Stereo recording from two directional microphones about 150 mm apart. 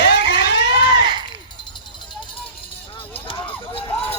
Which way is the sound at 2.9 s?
35° left (ahead or behind).